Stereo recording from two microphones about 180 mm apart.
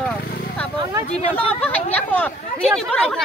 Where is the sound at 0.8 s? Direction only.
20° right (ahead or behind).